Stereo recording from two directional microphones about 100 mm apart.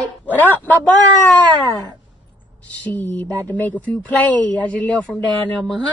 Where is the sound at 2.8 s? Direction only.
20° left (ahead or behind).